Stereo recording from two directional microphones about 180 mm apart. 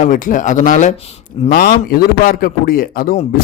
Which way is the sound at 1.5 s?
55° left (ahead or behind).